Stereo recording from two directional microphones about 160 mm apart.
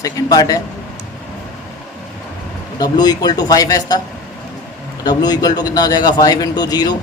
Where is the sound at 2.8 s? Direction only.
25° left (ahead or behind).